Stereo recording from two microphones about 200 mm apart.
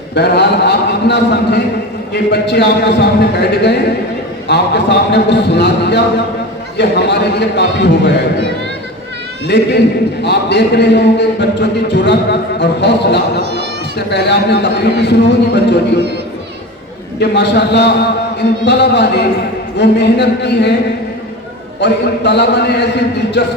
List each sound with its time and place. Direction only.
0.1 s a man's voice: 55° left (ahead or behind)
9.5 s a man's voice: 55° left (ahead or behind)
13.4 s speech: 55° right (ahead or behind)
14.1 s a man's voice: 55° left (ahead or behind)
17.2 s a man's voice: 55° left (ahead or behind)
21.8 s a man's voice: 60° left (ahead or behind)